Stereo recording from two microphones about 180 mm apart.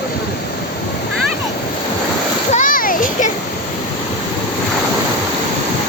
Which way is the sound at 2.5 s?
45° left (ahead or behind).